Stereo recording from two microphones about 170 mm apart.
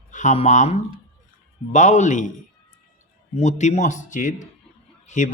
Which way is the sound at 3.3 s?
40° left (ahead or behind).